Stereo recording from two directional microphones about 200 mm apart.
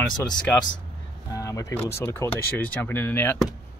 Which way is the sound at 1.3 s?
15° left (ahead or behind).